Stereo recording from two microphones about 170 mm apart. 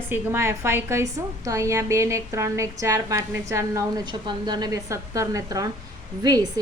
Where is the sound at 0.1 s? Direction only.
15° right (ahead or behind).